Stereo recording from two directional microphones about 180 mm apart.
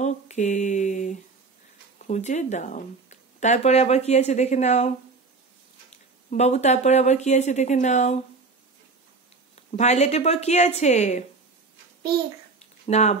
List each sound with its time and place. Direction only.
0.0 s mantra: 40° left (ahead or behind)
2.0 s speech: 40° left (ahead or behind)
6.3 s speech: 40° left (ahead or behind)
9.6 s speech: 40° left (ahead or behind)
12.8 s speech: 35° left (ahead or behind)